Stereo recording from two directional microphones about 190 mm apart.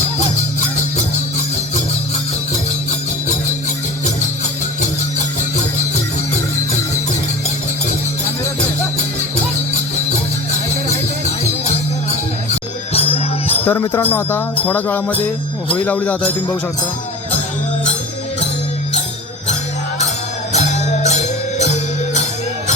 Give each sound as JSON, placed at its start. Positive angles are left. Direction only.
{"t": 12.9, "sound": "music", "side_deg": 30}
{"t": 13.7, "sound": "music", "side_deg": 10}
{"t": 20.5, "sound": "music", "side_deg": 35}